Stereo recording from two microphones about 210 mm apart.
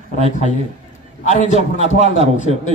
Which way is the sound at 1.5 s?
30° right (ahead or behind).